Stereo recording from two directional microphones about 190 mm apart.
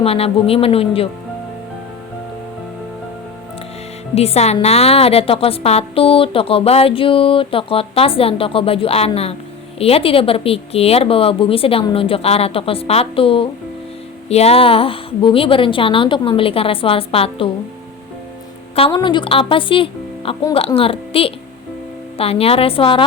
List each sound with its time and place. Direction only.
0.0 s speech: 30° left (ahead or behind)
4.1 s a woman's voice: 35° left (ahead or behind)
18.8 s a woman's voice: 25° left (ahead or behind)